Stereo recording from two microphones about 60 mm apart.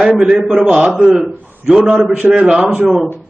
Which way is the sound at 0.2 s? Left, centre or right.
Centre.